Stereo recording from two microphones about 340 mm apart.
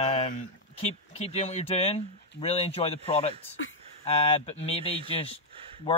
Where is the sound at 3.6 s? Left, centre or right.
Left.